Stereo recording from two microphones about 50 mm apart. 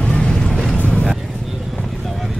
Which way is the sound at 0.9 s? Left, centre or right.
Centre.